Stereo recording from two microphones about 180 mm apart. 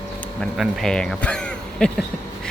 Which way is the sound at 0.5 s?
Centre (ahead or behind).